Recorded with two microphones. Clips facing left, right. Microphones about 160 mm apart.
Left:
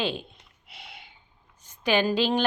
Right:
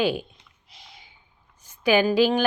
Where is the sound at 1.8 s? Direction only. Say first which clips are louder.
Right 4 dB; 5° right (ahead or behind).